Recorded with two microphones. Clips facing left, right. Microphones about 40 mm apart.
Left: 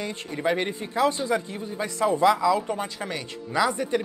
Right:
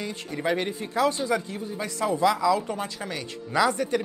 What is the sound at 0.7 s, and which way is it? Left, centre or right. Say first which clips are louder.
A man's voice: left 1 dB; centre.